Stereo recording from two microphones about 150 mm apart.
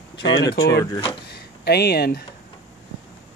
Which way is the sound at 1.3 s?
90° left.